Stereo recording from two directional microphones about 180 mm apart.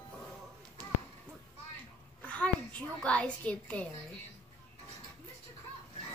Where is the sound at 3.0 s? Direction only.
5° left (ahead or behind).